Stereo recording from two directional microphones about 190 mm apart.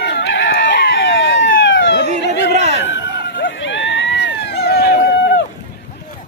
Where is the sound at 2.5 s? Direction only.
35° right (ahead or behind).